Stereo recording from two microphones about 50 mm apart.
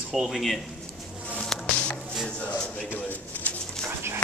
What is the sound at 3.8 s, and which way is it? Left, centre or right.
Dog, right.